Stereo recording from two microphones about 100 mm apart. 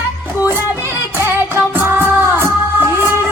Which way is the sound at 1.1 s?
25° right (ahead or behind).